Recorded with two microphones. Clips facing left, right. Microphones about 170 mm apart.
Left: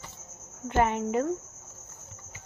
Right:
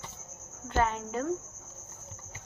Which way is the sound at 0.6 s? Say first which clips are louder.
Left 4 dB; 15° left (ahead or behind).